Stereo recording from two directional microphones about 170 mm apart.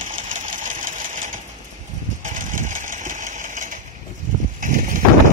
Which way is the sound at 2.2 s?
50° right (ahead or behind).